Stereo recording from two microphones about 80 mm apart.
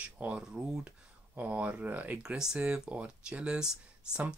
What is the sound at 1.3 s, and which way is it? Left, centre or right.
Speech, centre.